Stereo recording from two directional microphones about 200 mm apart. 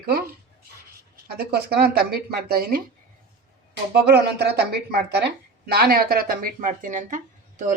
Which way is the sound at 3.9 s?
55° right (ahead or behind).